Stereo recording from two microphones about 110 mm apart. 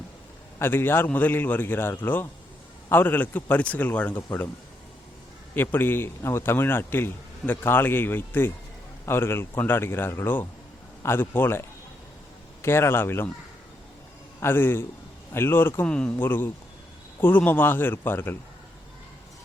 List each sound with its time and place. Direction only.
0.6 s a man's voice: 20° left (ahead or behind)
5.5 s a man's voice: 20° left (ahead or behind)
12.6 s a man's voice: 20° left (ahead or behind)
14.4 s a man's voice: 20° left (ahead or behind)
15.9 s a man's voice: 10° left (ahead or behind)
16.1 s a man's voice: 20° left (ahead or behind)